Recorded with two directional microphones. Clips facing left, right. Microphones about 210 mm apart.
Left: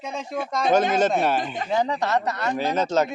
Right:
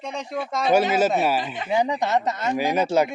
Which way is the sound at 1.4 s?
45° left (ahead or behind).